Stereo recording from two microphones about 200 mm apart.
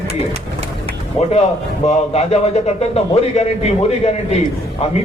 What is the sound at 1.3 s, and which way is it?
A man's voice, 35° left (ahead or behind).